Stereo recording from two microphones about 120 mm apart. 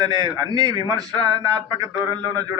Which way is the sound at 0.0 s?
35° right (ahead or behind).